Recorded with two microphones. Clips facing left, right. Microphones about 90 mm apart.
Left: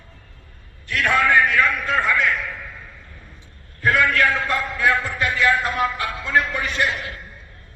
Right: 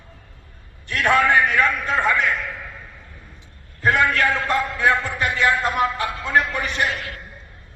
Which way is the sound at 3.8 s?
25° right (ahead or behind).